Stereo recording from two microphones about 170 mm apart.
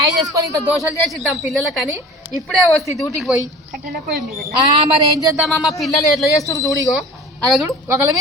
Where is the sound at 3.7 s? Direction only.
65° right (ahead or behind).